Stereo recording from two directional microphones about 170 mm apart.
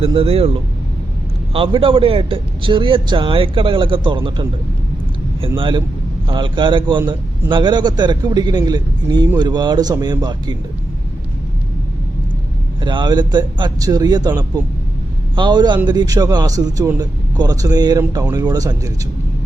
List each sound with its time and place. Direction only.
0.0 s a man's voice: 35° right (ahead or behind)
5.5 s a man's voice: 30° right (ahead or behind)
12.8 s a man's voice: 25° right (ahead or behind)